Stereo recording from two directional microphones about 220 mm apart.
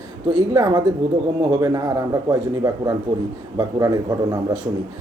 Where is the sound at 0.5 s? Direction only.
15° right (ahead or behind).